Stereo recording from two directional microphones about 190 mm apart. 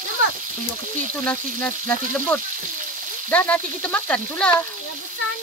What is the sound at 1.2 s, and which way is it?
Frying, 10° left (ahead or behind).